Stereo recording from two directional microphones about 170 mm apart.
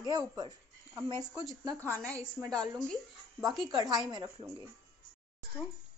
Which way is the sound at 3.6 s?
25° right (ahead or behind).